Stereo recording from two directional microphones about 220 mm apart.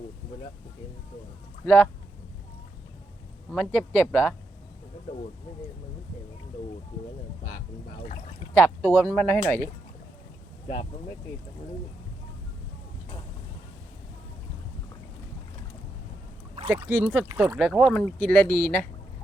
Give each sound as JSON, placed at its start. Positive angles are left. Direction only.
{"t": 1.6, "sound": "speech", "side_deg": 5}
{"t": 3.5, "sound": "speech", "side_deg": 5}
{"t": 8.5, "sound": "speech", "side_deg": 10}
{"t": 10.7, "sound": "speech", "side_deg": 30}
{"t": 16.6, "sound": "speech", "side_deg": -10}
{"t": 18.5, "sound": "speech", "side_deg": 40}